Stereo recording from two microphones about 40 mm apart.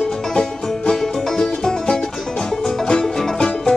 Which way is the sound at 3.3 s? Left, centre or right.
Left.